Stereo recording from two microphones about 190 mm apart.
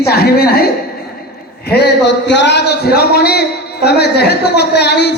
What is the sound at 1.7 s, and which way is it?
A man's voice, 60° left (ahead or behind).